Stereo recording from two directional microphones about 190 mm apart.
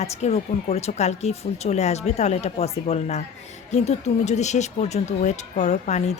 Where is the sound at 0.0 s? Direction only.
35° left (ahead or behind).